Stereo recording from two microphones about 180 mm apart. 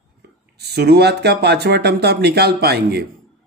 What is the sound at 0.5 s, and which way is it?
Speech, 65° right (ahead or behind).